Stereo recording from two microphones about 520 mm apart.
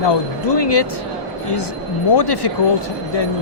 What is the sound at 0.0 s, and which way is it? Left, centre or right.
Speech, left.